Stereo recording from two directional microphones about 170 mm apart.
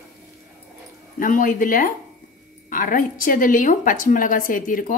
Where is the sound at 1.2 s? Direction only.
55° left (ahead or behind).